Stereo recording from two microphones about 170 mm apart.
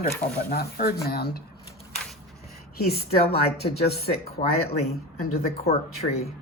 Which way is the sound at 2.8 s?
65° left (ahead or behind).